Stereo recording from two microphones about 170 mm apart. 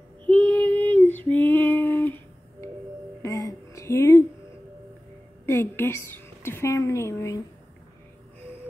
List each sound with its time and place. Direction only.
0.3 s female singing: 10° left (ahead or behind)
3.2 s a sound: 20° left (ahead or behind)
5.5 s a woman's voice: 15° left (ahead or behind)